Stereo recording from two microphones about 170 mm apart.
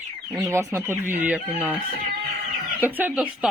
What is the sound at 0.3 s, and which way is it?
Speech, 20° right (ahead or behind).